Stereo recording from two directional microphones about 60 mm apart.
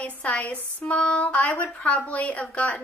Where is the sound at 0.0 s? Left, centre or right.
Left.